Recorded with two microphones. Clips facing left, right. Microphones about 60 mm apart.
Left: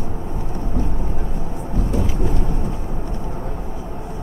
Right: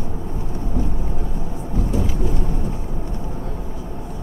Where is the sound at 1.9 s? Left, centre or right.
Left.